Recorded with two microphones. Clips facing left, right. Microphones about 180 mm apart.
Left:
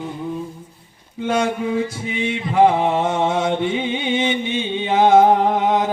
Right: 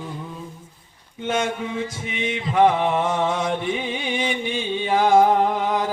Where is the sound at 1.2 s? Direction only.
35° left (ahead or behind).